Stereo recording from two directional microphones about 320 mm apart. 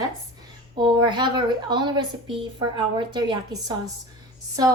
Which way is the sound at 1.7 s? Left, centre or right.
Centre.